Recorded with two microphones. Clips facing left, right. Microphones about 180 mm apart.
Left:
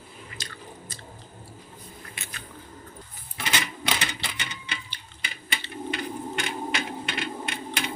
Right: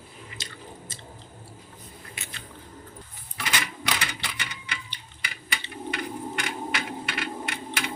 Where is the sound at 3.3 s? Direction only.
25° left (ahead or behind).